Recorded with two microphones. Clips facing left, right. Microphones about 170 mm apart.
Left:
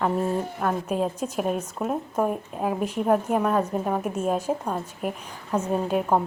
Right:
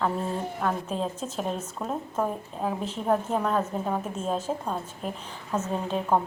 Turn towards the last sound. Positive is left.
turn(degrees=10)  # may be behind; listen again after turning